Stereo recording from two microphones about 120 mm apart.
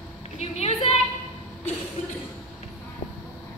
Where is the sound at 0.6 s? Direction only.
55° left (ahead or behind).